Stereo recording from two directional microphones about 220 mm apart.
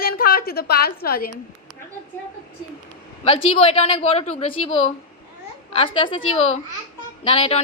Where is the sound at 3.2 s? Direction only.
25° left (ahead or behind).